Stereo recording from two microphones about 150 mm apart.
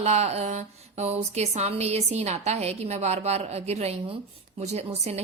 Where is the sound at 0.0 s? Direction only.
45° right (ahead or behind).